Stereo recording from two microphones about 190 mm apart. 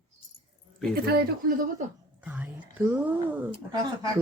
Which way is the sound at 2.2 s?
10° right (ahead or behind).